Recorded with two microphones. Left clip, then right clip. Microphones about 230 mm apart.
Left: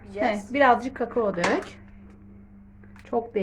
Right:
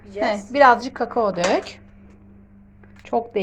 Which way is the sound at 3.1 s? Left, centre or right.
Centre.